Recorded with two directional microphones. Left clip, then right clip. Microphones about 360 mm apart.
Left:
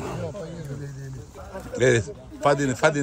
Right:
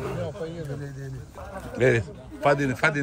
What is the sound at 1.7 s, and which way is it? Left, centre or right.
A man's voice, centre.